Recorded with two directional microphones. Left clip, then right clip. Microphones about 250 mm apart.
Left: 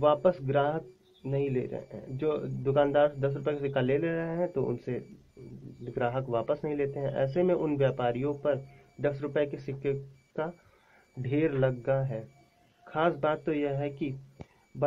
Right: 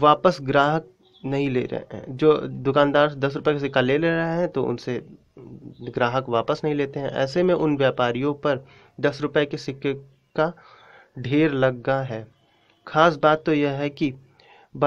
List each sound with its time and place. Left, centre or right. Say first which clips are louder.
0.0 s speech: right 7 dB; right